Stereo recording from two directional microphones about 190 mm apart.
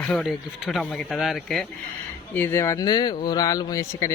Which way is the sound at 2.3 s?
15° left (ahead or behind).